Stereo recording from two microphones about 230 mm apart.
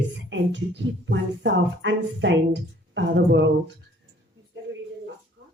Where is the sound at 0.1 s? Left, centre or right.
Right.